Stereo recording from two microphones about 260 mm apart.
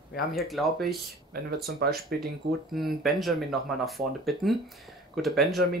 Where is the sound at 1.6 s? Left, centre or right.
Right.